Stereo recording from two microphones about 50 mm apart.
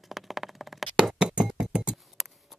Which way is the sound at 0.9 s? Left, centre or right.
Centre.